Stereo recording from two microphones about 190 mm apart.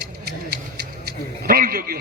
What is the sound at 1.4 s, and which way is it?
Speech, 50° right (ahead or behind).